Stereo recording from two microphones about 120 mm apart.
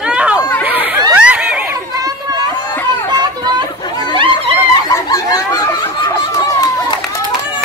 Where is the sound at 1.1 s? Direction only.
10° right (ahead or behind).